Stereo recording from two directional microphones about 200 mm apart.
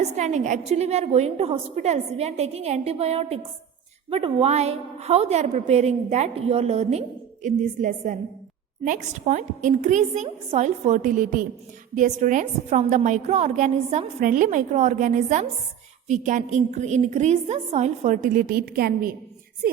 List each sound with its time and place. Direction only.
0.0 s a woman's voice: 35° right (ahead or behind)